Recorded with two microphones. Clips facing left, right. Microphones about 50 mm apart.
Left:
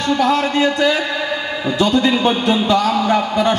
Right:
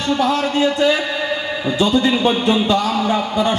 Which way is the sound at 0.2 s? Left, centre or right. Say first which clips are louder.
Left 1 dB; left.